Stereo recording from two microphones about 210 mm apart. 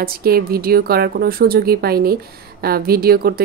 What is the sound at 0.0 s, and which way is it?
Speech, 45° right (ahead or behind).